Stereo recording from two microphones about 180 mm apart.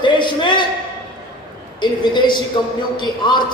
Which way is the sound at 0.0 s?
25° left (ahead or behind).